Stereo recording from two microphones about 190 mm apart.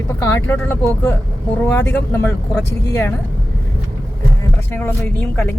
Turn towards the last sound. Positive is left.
turn(degrees=10)  # may be behind; listen again after turning